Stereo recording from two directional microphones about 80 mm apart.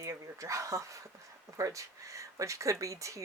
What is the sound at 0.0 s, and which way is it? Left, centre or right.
Speech, right.